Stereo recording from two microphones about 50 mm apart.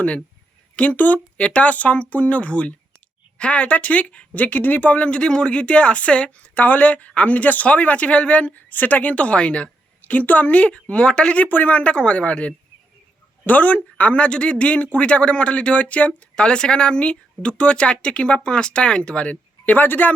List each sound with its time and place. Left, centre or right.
0.8 s speech: left
4.4 s speech: left
10.0 s speech: left
11.3 s speech: left